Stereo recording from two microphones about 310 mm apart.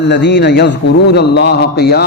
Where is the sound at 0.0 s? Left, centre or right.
Left.